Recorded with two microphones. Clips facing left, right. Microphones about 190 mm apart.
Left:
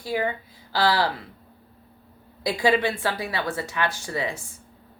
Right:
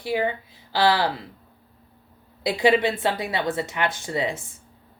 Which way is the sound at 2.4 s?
20° right (ahead or behind).